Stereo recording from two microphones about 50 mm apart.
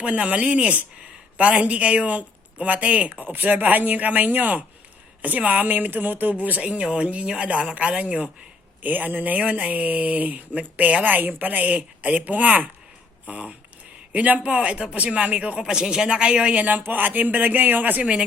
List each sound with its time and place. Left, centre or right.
0.0 s speech: right
8.8 s speech: right
15.6 s speech: centre; by 18.0 s right
18.0 s speech: centre